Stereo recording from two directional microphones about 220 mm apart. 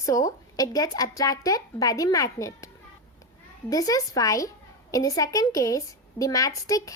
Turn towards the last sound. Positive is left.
turn(degrees=15)  # may be behind; listen again after turning